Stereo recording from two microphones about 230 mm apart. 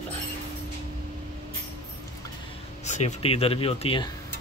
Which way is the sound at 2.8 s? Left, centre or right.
Left.